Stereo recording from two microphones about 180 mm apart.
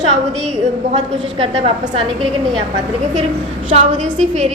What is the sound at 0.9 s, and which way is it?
A woman's voice, 30° right (ahead or behind).